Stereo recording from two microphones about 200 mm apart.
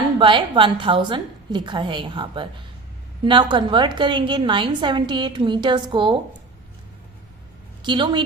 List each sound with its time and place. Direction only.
0.2 s a woman's voice: 25° right (ahead or behind)
7.8 s a woman's voice: 25° right (ahead or behind)